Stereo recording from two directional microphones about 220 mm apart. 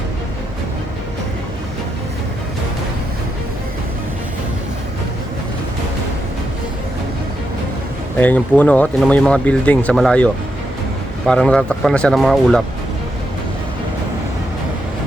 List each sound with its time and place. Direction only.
8.2 s speech: 5° left (ahead or behind)
11.3 s speech: 5° left (ahead or behind)